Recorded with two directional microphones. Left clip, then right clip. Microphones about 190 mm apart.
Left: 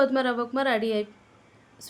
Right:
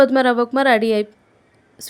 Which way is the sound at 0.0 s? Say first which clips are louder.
Right 9 dB; 40° right (ahead or behind).